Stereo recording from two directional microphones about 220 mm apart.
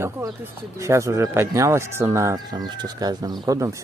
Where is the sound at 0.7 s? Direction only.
15° right (ahead or behind).